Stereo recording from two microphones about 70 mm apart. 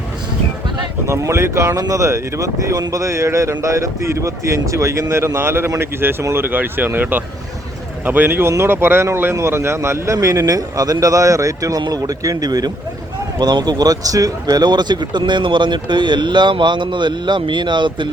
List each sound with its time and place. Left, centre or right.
1.1 s a man's voice: right
13.4 s speech: right